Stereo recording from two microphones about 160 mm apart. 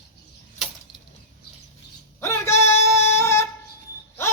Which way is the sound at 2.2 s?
15° left (ahead or behind).